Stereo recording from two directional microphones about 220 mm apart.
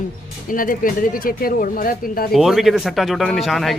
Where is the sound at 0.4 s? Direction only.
40° left (ahead or behind).